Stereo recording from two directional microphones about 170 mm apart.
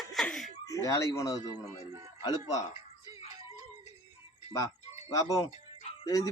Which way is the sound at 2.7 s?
20° right (ahead or behind).